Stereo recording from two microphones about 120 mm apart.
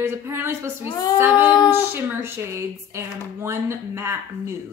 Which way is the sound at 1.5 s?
30° left (ahead or behind).